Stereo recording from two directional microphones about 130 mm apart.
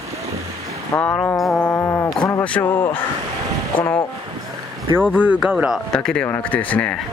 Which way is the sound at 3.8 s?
25° left (ahead or behind).